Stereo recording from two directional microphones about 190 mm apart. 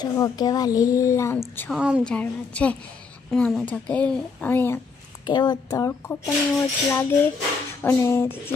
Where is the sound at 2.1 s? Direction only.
5° left (ahead or behind).